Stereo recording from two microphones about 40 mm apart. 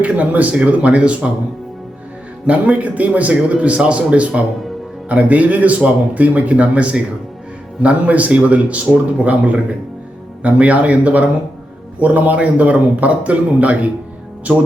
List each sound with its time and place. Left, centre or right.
0.0 s a man's voice: right
2.5 s a man's voice: right